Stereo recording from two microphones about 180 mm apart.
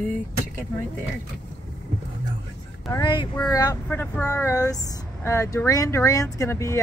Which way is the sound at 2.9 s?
25° left (ahead or behind).